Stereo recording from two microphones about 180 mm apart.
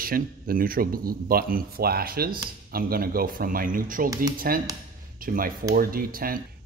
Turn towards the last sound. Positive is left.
turn(degrees=-55)  # may be behind; listen again after turning